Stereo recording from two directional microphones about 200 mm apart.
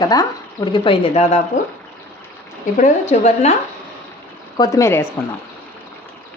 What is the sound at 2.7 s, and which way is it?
Speech, 35° left (ahead or behind).